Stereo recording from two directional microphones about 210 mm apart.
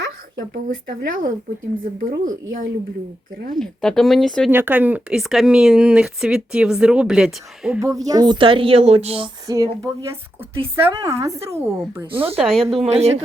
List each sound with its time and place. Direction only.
0.5 s a woman's voice: 40° right (ahead or behind)
3.5 s speech: centre (ahead or behind)
4.5 s speech: 10° right (ahead or behind)
7.9 s a woman's voice: 15° right (ahead or behind); by 12.6 s centre (ahead or behind)
12.7 s a woman's voice: 30° right (ahead or behind)